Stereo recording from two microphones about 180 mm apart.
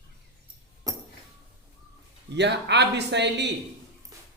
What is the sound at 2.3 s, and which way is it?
Speech, 70° right (ahead or behind).